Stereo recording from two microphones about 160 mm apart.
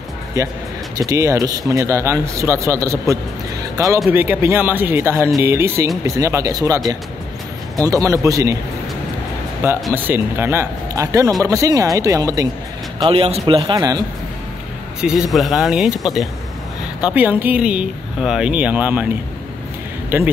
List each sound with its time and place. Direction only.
0.4 s speech: 20° right (ahead or behind)
9.6 s speech: 15° right (ahead or behind)
13.1 s a man's voice: 35° right (ahead or behind)
13.6 s speech: 25° right (ahead or behind)
15.0 s speech: 5° right (ahead or behind)
20.1 s speech: 10° right (ahead or behind)